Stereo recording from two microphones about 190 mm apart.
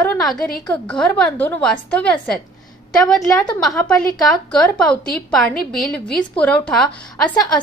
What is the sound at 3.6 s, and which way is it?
A woman's voice, 5° left (ahead or behind).